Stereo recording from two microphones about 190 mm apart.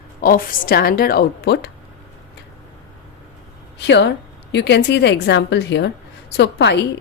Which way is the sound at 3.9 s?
65° left (ahead or behind).